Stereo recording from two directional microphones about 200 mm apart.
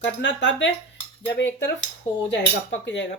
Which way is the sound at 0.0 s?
60° left (ahead or behind).